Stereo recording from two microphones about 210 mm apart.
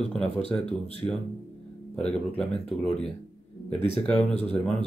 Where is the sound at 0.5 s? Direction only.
20° left (ahead or behind).